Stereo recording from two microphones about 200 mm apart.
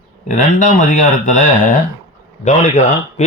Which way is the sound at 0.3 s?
40° left (ahead or behind).